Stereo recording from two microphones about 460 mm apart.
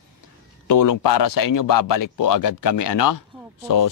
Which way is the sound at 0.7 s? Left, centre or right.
Left.